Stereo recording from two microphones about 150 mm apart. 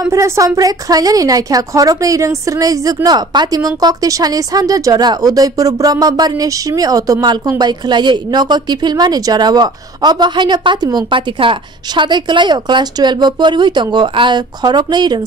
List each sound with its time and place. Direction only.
0.0 s a woman's voice: 20° right (ahead or behind)